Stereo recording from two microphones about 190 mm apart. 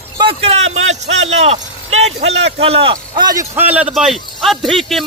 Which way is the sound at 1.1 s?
90° right.